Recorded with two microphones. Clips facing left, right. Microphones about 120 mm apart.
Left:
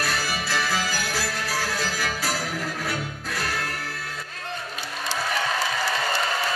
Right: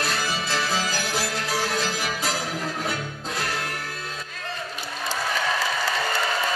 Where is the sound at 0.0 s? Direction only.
20° right (ahead or behind).